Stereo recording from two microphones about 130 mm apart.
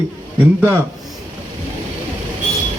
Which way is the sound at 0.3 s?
15° right (ahead or behind).